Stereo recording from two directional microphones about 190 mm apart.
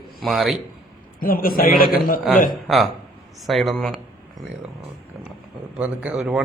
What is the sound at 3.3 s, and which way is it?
Speech, centre (ahead or behind).